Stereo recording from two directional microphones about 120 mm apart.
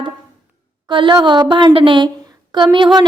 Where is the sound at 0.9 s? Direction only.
45° right (ahead or behind).